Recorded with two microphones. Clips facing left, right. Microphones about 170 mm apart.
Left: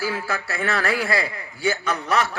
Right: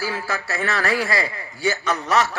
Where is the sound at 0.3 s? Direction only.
55° left (ahead or behind).